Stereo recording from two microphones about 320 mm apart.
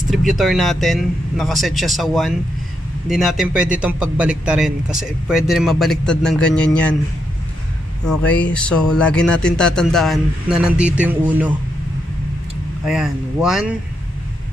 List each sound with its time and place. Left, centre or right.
0.4 s speech: centre
8.1 s speech: centre
12.8 s speech: centre